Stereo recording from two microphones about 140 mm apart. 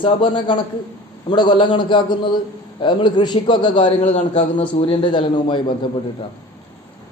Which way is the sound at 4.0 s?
55° left (ahead or behind).